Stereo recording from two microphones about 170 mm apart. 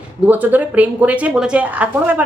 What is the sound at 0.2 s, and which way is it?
A woman's voice, 10° right (ahead or behind).